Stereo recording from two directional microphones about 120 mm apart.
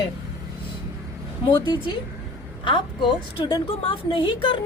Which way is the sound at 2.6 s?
45° left (ahead or behind).